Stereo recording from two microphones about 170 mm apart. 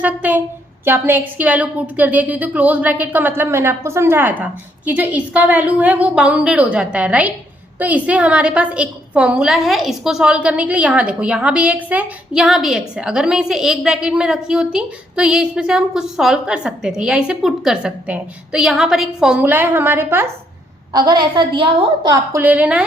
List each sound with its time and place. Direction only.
0.0 s a woman's voice: 10° right (ahead or behind)
20.9 s a woman's voice: 25° right (ahead or behind); by 22.8 s 10° right (ahead or behind)